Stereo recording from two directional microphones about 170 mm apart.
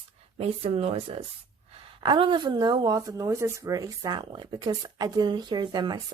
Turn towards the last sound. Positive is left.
turn(degrees=-25)  # may be behind; listen again after turning